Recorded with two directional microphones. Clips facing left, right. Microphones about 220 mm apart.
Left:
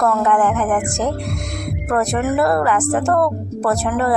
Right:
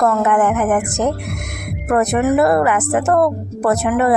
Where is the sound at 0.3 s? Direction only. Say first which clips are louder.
Right 2 dB; 20° right (ahead or behind).